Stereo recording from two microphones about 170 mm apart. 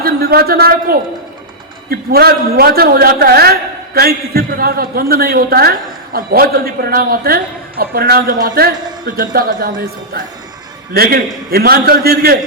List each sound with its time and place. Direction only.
0.0 s a man's voice: 65° right (ahead or behind)
9.0 s a man's voice: 55° right (ahead or behind)
10.9 s a man's voice: 65° right (ahead or behind)